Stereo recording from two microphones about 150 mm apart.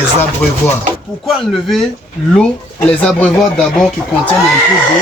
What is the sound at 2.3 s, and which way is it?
Speech, 5° left (ahead or behind).